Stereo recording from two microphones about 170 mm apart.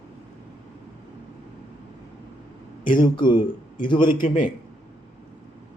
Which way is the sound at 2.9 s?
25° left (ahead or behind).